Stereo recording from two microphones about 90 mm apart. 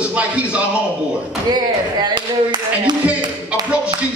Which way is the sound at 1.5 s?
50° right (ahead or behind).